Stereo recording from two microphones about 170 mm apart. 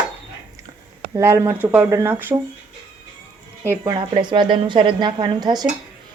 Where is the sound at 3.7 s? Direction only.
25° right (ahead or behind).